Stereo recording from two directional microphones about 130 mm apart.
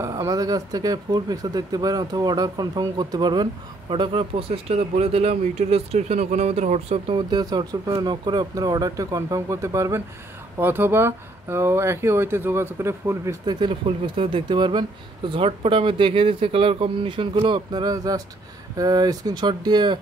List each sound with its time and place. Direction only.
0.0 s speech: 25° right (ahead or behind); by 7.0 s 60° right (ahead or behind)
7.1 s speech: 35° right (ahead or behind)